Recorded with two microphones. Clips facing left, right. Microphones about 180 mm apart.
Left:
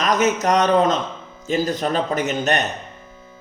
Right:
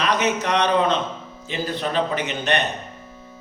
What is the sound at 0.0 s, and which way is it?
A man's voice, 45° left (ahead or behind).